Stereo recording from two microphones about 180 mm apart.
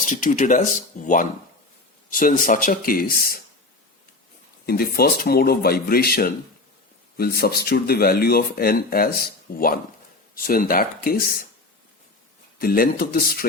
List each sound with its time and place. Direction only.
0.0 s speech: 45° left (ahead or behind)
4.6 s speech: 55° left (ahead or behind)
12.5 s speech: 55° left (ahead or behind)